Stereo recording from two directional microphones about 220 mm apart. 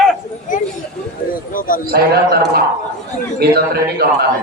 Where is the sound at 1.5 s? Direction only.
40° left (ahead or behind).